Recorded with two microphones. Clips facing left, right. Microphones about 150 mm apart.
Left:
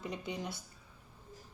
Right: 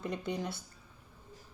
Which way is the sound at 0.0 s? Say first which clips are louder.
Right 4 dB; 55° right (ahead or behind).